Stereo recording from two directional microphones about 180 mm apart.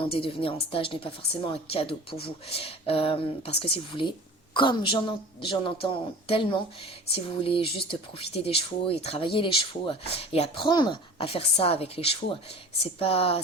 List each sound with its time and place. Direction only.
0.1 s speech: 30° left (ahead or behind)